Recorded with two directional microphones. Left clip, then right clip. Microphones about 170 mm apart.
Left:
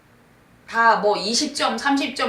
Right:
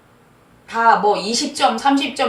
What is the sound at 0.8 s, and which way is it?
A woman's voice, 30° left (ahead or behind).